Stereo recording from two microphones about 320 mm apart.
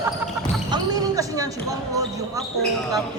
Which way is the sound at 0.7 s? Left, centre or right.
Centre.